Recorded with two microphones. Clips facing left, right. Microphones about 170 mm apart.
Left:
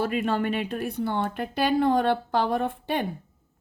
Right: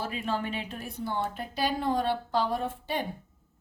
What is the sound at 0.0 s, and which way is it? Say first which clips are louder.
Speech: left 7 dB; 60° left (ahead or behind).